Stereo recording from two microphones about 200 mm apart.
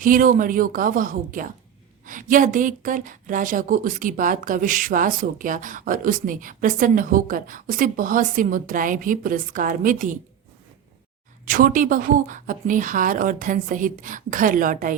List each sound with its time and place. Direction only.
0.0 s speech: 45° right (ahead or behind)
11.4 s speech: 45° right (ahead or behind)